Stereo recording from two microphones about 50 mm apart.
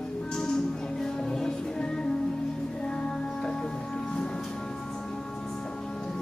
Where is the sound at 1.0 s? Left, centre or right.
Centre.